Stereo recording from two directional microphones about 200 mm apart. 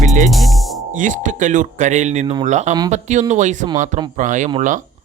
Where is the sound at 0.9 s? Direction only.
40° right (ahead or behind).